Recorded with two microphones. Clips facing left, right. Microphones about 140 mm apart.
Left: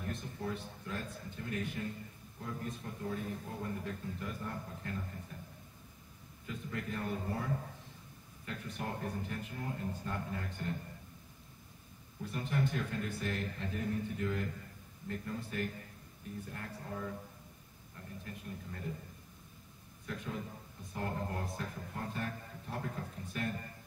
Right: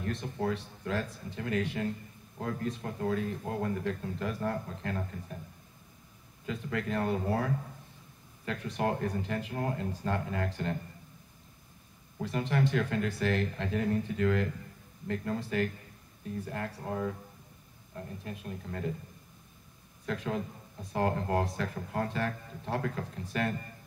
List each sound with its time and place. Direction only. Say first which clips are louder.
0.0 s speech: right 7 dB; 90° right
6.4 s speech: right 7 dB; 90° right
12.2 s speech: right 6 dB; 90° right
18.3 s speech: right 6 dB; 90° right
20.1 s speech: right 8 dB; 90° right